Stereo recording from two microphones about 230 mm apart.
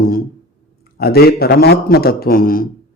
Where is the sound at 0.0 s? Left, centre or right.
Left.